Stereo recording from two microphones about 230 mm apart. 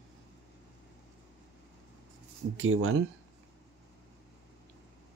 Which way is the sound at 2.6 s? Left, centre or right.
Right.